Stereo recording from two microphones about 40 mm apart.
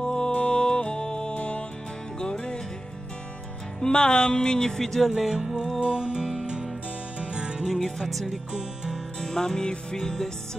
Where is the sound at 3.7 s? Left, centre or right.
Centre.